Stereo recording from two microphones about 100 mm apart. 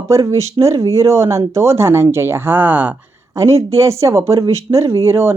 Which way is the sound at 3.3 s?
30° right (ahead or behind).